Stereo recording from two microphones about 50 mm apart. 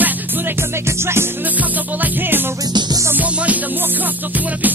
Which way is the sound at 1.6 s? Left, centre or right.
Right.